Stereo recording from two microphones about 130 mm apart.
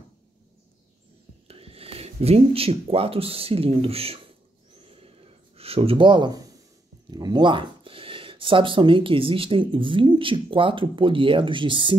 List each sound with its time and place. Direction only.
1.5 s speech: 50° right (ahead or behind)
4.8 s a sound: 50° right (ahead or behind); by 6.6 s 30° right (ahead or behind)
7.1 s speech: 35° right (ahead or behind)